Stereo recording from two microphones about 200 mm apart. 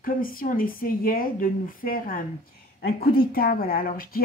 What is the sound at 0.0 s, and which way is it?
A woman's voice, 45° left (ahead or behind).